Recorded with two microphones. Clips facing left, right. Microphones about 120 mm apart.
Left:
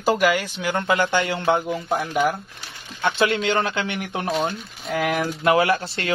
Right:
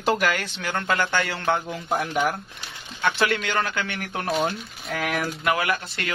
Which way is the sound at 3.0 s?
20° left (ahead or behind).